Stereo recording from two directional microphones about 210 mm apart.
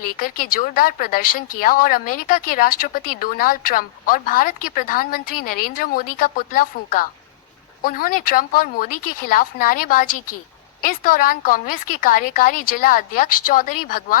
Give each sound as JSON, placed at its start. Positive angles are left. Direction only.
{"t": 0.2, "sound": "a woman's voice", "side_deg": 40}